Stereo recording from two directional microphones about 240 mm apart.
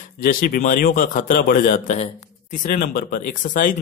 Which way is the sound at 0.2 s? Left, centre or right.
Left.